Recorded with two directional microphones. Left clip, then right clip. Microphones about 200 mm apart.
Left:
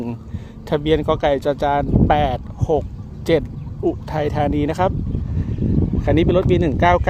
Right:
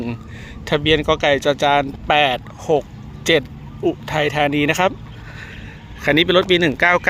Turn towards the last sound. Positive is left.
turn(degrees=20)  # may be behind; listen again after turning